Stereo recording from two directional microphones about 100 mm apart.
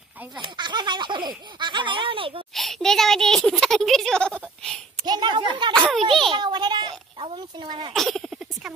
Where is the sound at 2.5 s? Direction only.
Centre (ahead or behind).